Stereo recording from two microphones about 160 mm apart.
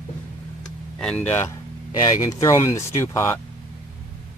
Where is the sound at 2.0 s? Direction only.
20° left (ahead or behind).